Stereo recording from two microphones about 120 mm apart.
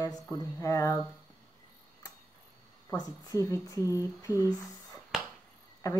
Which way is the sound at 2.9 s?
30° left (ahead or behind).